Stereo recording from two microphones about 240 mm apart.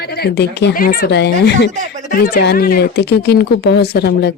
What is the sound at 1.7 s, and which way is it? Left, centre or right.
Speech, right.